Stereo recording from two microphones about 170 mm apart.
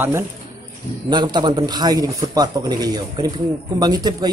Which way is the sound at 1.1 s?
25° right (ahead or behind).